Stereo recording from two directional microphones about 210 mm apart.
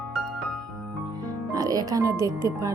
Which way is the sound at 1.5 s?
15° right (ahead or behind).